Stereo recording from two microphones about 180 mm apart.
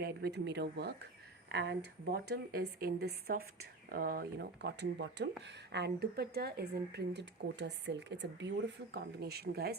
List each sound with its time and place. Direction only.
0.0 s speech: 65° right (ahead or behind)